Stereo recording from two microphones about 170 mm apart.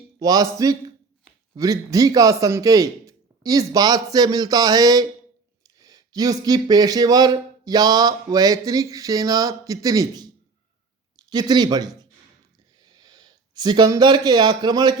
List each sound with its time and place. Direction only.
0.2 s speech: 20° right (ahead or behind)